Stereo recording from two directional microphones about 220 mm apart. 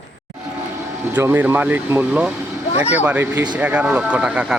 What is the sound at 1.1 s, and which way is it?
Speech, 10° right (ahead or behind).